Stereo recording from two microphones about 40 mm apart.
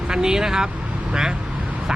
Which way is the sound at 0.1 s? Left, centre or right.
Centre.